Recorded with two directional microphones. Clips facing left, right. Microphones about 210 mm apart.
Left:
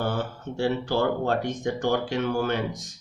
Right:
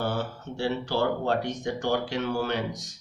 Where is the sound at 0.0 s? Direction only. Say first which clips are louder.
Left 1 dB; 50° left (ahead or behind).